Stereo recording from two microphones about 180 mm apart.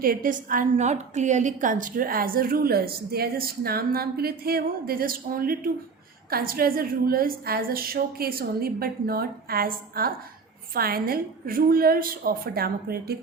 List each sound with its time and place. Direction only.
0.0 s a woman's voice: 50° right (ahead or behind)